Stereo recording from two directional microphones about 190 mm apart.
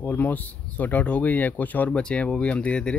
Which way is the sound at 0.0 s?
10° left (ahead or behind).